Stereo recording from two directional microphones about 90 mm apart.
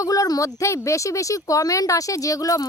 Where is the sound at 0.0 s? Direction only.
40° left (ahead or behind).